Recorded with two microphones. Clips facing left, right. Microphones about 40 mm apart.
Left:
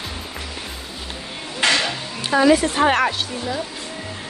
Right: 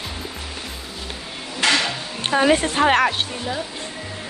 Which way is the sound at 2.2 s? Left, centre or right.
Right.